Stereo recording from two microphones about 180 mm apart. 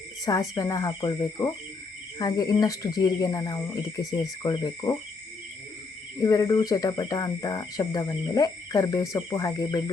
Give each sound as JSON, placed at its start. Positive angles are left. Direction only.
{"t": 0.3, "sound": "speech", "side_deg": 20}
{"t": 6.2, "sound": "speech", "side_deg": 20}